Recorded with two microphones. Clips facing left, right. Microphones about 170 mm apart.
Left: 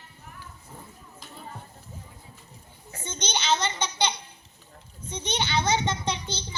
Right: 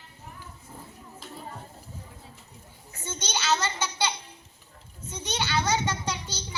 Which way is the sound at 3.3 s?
20° left (ahead or behind).